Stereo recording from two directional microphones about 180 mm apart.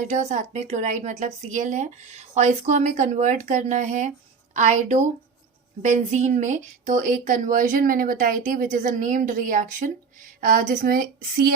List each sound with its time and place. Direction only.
0.0 s a woman's voice: 40° right (ahead or behind); by 11.5 s 60° right (ahead or behind)